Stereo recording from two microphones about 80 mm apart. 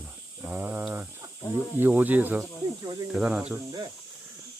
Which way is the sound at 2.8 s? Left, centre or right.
Right.